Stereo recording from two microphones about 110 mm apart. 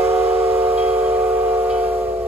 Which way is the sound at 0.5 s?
15° right (ahead or behind).